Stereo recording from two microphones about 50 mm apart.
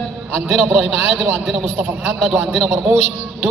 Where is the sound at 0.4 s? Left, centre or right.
Centre.